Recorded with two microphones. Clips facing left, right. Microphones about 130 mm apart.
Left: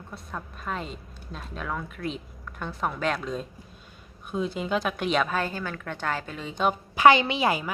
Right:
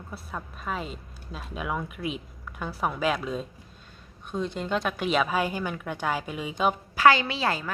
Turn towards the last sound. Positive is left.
turn(degrees=15)  # may be behind; listen again after turning